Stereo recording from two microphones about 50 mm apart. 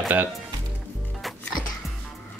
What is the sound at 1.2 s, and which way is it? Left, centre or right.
Music, centre.